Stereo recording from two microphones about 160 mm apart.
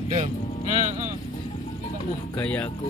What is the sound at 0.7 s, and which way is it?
Vehicle, 45° right (ahead or behind).